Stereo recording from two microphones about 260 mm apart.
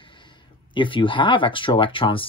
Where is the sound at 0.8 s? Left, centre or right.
Centre.